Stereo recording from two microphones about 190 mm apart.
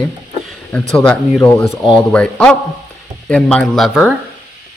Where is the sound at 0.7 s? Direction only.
5° left (ahead or behind).